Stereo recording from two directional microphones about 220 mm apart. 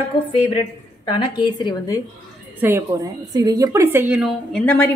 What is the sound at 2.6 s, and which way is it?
A woman's voice, 15° right (ahead or behind).